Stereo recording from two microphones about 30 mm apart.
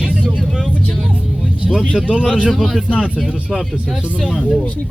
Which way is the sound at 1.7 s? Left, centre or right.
Left.